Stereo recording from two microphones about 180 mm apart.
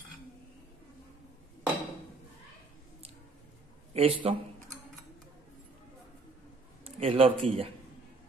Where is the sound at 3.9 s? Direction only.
30° right (ahead or behind).